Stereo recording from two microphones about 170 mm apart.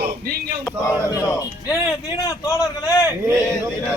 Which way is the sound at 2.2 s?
20° left (ahead or behind).